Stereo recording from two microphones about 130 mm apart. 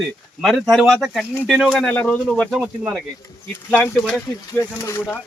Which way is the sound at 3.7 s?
15° left (ahead or behind).